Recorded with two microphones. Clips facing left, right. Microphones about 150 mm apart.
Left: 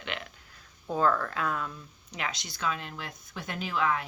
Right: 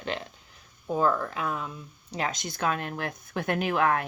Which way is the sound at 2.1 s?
40° right (ahead or behind).